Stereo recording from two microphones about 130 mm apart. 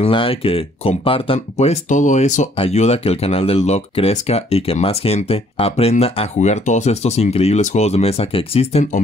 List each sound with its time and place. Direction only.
0.0 s speech: 45° left (ahead or behind); by 2.4 s 70° left (ahead or behind)
2.5 s speech: 50° left (ahead or behind)